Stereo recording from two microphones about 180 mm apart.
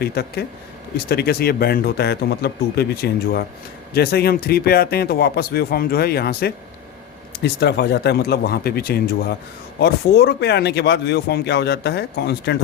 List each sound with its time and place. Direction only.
0.0 s speech: 60° left (ahead or behind)